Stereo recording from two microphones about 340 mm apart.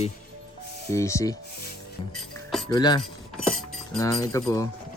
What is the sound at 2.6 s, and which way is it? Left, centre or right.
Speech, centre.